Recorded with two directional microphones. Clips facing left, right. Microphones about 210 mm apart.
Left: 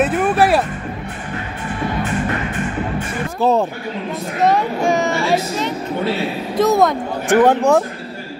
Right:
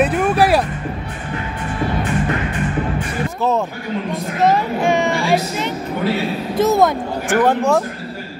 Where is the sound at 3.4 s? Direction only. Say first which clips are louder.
Left 4 dB; 35° left (ahead or behind).